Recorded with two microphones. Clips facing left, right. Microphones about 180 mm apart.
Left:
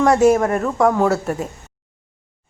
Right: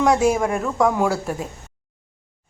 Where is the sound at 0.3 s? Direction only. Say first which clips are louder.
Left 3 dB; centre (ahead or behind).